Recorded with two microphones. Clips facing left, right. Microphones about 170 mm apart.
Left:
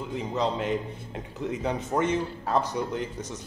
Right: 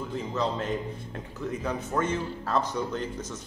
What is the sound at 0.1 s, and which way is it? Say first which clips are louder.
A man's voice: left 2 dB; 15° left (ahead or behind).